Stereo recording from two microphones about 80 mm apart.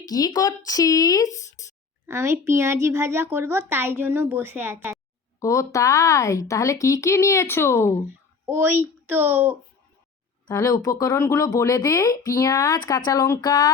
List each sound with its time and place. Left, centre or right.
0.0 s speech: left
2.0 s speech: right
5.4 s a woman's voice: left
8.0 s speech: right
10.5 s speech: left
13.4 s a sound: left